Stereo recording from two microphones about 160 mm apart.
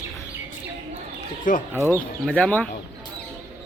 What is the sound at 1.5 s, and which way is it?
Speech, 55° left (ahead or behind).